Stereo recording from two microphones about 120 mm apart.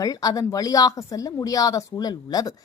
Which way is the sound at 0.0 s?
30° left (ahead or behind).